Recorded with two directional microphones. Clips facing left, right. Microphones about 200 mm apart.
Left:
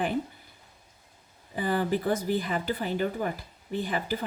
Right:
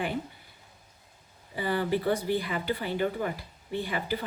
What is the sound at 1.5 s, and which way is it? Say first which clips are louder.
Speech: left 1 dB; 45° left (ahead or behind).